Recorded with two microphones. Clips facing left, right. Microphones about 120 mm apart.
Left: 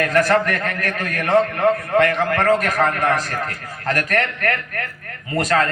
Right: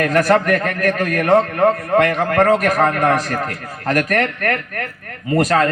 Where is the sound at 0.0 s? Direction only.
35° right (ahead or behind).